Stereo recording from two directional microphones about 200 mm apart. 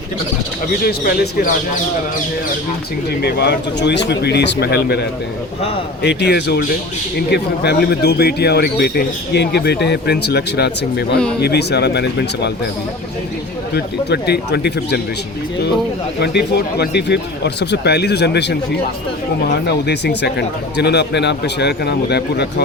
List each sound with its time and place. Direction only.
0.9 s speech: 50° left (ahead or behind)
3.1 s speech: 55° left (ahead or behind)
13.7 s speech: 55° left (ahead or behind)
16.2 s speech: 55° left (ahead or behind)